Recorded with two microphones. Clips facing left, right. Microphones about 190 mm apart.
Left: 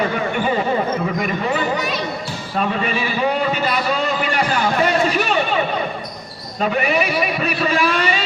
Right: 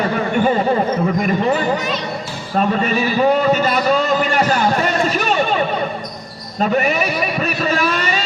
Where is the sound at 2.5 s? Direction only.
40° right (ahead or behind).